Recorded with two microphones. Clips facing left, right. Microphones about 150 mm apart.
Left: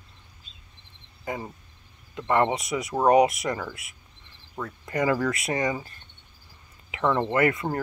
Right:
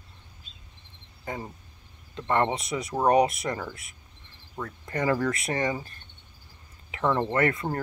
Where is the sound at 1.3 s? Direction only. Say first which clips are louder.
Left 2 dB; 15° left (ahead or behind).